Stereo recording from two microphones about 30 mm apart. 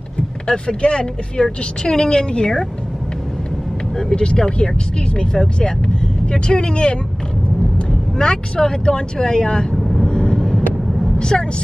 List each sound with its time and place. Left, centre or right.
0.5 s speech: left
4.1 s speech: left
8.2 s speech: left
9.8 s vehicle: centre
10.0 s vehicle: left
10.4 s vehicle: centre
11.1 s a woman's voice: left